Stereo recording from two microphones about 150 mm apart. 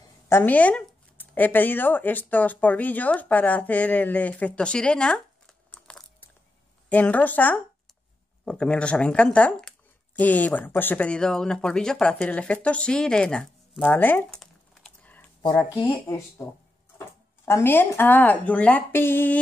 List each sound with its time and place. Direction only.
0.3 s speech: 10° left (ahead or behind)
17.5 s speech: 15° left (ahead or behind)